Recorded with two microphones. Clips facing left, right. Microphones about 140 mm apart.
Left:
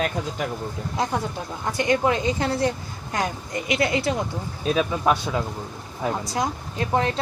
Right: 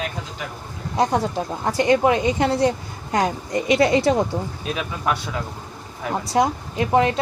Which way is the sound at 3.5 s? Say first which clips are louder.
Right 6 dB; 35° right (ahead or behind).